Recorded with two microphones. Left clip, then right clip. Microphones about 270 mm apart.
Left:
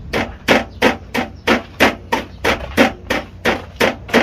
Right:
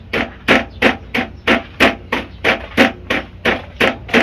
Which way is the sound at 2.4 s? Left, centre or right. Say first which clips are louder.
Right 2 dB; centre.